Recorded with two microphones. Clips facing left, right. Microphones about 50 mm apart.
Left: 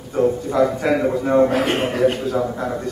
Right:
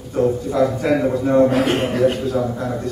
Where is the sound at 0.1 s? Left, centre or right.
Centre.